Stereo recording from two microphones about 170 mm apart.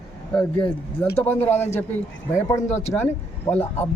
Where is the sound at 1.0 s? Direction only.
15° left (ahead or behind).